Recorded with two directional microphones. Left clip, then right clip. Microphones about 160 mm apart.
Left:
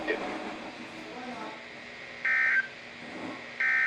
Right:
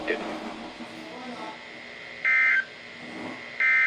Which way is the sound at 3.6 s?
30° right (ahead or behind).